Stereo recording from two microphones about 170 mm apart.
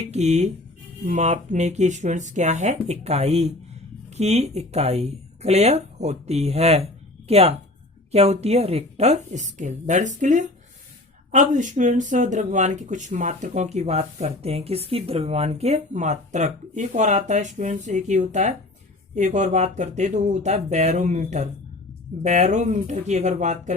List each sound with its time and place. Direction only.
0.0 s speech: 40° right (ahead or behind)